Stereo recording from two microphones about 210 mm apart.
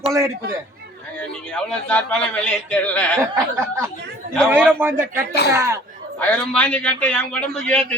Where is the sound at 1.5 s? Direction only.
5° left (ahead or behind).